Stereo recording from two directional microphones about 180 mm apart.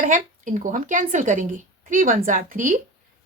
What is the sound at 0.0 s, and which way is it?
A woman's voice, 45° right (ahead or behind).